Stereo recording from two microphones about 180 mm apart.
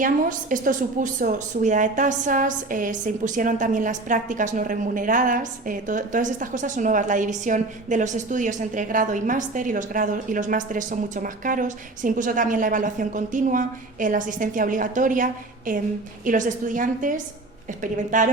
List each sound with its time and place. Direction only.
0.0 s a woman's voice: 50° right (ahead or behind)